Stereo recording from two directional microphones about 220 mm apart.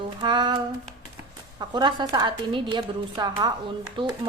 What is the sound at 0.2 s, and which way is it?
A woman's voice, 20° right (ahead or behind).